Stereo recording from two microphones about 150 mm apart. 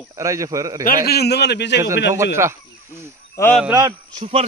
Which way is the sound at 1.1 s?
90° left.